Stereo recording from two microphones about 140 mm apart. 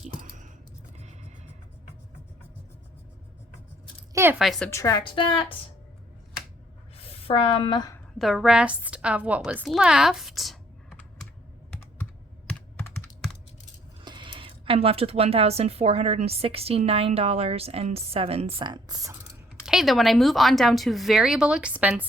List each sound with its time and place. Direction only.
0.2 s a sound: 65° right (ahead or behind)
4.1 s a sound: 20° right (ahead or behind)
4.4 s a woman's voice: centre (ahead or behind)
4.7 s a woman's voice: 25° left (ahead or behind)
5.0 s a woman's voice: 40° left (ahead or behind)
6.9 s a woman's voice: 45° left (ahead or behind)
8.2 s a woman's voice: centre (ahead or behind)
12.5 s computer keyboard: 10° left (ahead or behind)
14.0 s speech: 35° right (ahead or behind)
18.6 s speech: 30° right (ahead or behind)
19.6 s a woman's voice: centre (ahead or behind)